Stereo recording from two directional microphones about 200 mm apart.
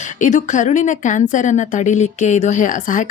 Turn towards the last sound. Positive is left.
turn(degrees=40)  # may be behind; listen again after turning